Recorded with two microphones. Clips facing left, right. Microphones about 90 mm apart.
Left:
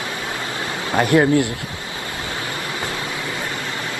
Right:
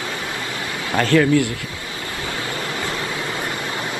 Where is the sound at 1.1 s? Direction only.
30° left (ahead or behind).